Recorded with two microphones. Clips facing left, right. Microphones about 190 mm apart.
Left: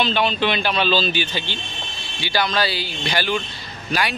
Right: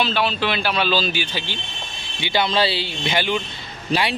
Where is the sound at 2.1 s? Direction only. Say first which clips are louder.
Right 2 dB; 20° right (ahead or behind).